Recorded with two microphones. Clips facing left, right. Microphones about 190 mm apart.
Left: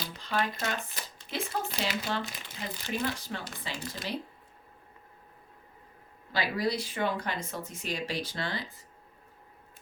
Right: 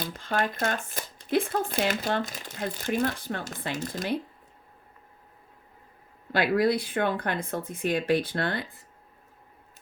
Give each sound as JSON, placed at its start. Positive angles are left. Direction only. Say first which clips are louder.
{"t": 0.0, "sound": "speech", "louder": "right 3 dB", "side_deg": -50}
{"t": 6.3, "sound": "speech", "louder": "right 7 dB", "side_deg": -55}